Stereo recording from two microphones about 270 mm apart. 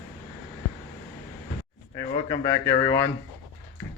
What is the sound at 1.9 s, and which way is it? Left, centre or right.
Speech, centre.